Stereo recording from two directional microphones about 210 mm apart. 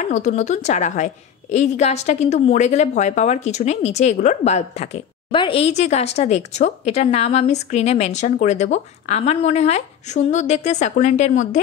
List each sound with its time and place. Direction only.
0.1 s a woman's voice: 35° left (ahead or behind)